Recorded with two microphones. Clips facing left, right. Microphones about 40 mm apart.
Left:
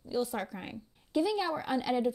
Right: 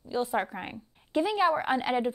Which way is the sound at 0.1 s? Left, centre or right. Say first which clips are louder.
Right 4 dB; right.